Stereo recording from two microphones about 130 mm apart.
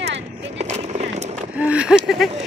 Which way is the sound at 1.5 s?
10° right (ahead or behind).